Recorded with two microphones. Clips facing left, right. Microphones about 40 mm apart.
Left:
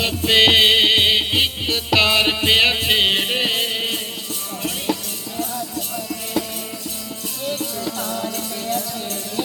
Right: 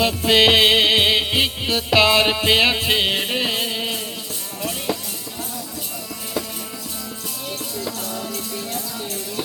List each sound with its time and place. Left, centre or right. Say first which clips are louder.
0.0 s music: even; centre
8.0 s music: left 3 dB; left